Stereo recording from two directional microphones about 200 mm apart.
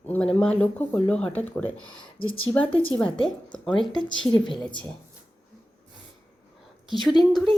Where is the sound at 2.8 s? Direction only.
5° left (ahead or behind).